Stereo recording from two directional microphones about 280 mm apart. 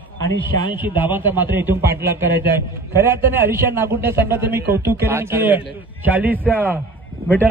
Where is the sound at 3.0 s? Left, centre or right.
Centre.